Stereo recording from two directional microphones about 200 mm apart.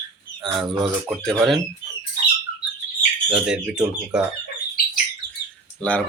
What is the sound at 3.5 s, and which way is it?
Speech, 5° right (ahead or behind).